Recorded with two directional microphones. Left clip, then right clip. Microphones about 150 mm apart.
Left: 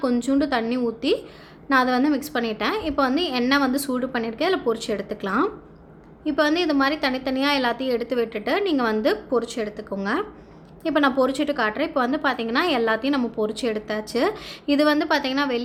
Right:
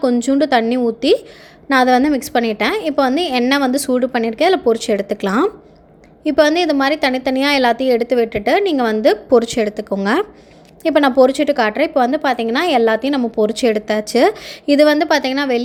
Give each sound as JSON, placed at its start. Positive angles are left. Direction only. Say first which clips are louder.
{"t": 0.0, "sound": "a woman's voice", "louder": "right 7 dB", "side_deg": -40}